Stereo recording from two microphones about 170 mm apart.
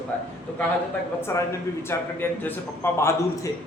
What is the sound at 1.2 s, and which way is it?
A man's voice, 15° left (ahead or behind).